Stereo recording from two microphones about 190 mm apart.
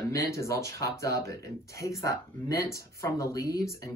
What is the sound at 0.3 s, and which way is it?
Speech, 15° left (ahead or behind).